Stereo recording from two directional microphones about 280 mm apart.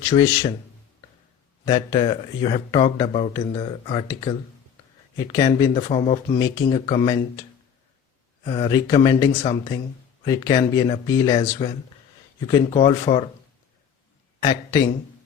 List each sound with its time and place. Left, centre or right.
0.1 s speech: centre
1.6 s speech: centre
8.4 s speech: centre
14.4 s speech: centre